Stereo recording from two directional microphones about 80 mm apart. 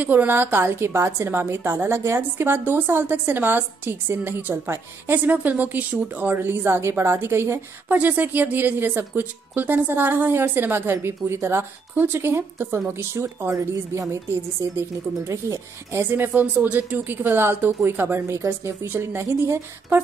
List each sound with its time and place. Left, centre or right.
0.0 s a woman's voice: right
7.9 s a woman's voice: right